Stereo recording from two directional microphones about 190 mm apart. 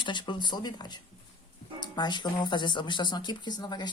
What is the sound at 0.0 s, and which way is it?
Speech, 25° left (ahead or behind).